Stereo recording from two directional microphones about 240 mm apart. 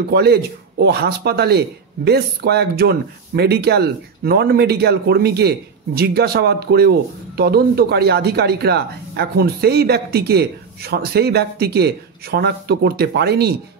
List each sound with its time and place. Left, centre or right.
0.1 s speech: right